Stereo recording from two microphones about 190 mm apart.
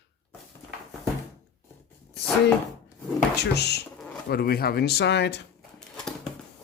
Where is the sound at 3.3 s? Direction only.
60° left (ahead or behind).